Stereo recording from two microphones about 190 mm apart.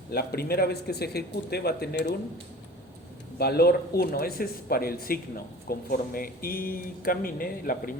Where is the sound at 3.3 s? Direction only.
55° left (ahead or behind).